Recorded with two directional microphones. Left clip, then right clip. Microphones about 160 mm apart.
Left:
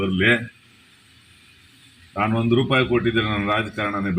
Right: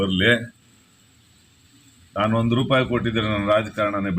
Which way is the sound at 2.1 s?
Centre (ahead or behind).